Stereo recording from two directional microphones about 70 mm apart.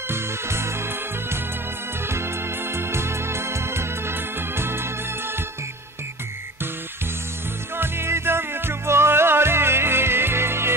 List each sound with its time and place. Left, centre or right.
0.1 s music: right
2.0 s organ: right
7.7 s music: right